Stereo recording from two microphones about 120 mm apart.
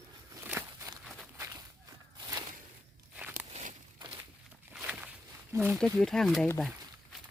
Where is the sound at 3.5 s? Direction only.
75° right (ahead or behind).